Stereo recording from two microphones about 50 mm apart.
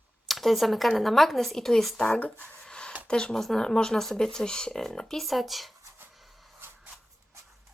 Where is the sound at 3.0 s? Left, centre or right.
Centre.